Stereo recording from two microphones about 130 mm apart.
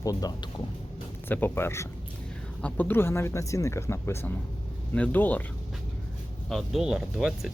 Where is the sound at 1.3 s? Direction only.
15° left (ahead or behind).